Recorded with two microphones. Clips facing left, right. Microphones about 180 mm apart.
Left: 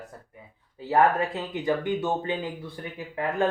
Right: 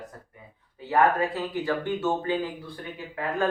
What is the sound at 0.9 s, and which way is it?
Speech, 20° left (ahead or behind).